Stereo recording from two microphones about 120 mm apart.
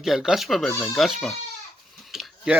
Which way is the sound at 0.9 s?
Centre (ahead or behind).